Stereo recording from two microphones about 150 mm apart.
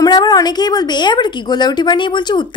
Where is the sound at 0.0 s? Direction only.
25° left (ahead or behind).